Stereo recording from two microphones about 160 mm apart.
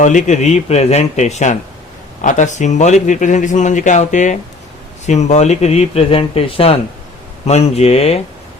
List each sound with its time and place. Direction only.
0.0 s speech: 50° left (ahead or behind)